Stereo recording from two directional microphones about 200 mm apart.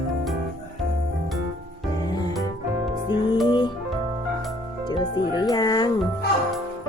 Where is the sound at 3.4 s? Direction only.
20° left (ahead or behind).